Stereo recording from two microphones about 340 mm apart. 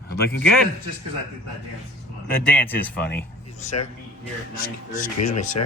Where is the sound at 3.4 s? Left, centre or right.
Left.